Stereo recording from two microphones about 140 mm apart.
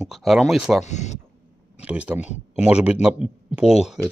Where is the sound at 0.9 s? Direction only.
55° left (ahead or behind).